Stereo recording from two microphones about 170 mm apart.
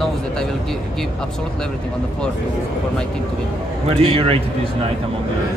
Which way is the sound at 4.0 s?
35° right (ahead or behind).